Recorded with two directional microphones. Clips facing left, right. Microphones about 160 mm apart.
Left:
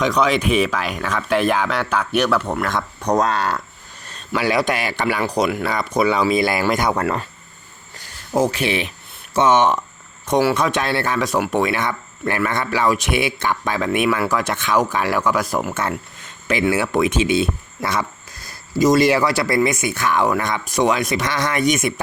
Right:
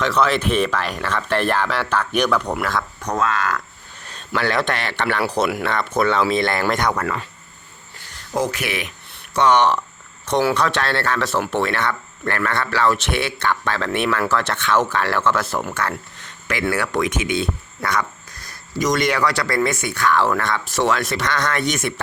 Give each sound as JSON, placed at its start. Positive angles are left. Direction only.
{"t": 0.0, "sound": "speech", "side_deg": 15}
{"t": 3.0, "sound": "speech", "side_deg": 35}
{"t": 4.1, "sound": "a man's voice", "side_deg": 5}
{"t": 5.2, "sound": "speech", "side_deg": -5}
{"t": 6.9, "sound": "speech", "side_deg": 35}
{"t": 8.3, "sound": "speech", "side_deg": 30}